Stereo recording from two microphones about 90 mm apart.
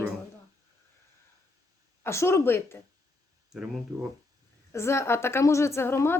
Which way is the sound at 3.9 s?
40° right (ahead or behind).